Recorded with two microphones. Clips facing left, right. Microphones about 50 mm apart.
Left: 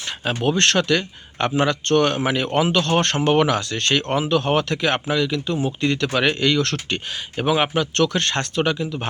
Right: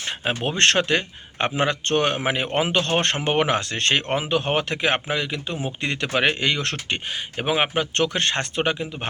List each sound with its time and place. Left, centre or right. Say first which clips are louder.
0.4 s speech: left 2 dB; right